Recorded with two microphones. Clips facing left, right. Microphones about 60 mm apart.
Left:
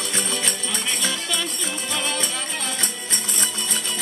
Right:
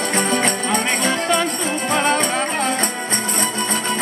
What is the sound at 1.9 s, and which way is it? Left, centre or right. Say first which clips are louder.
Music: right 10 dB; right.